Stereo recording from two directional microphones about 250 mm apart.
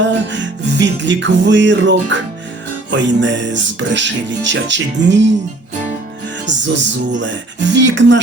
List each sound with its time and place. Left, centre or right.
0.0 s music: right
6.4 s music: right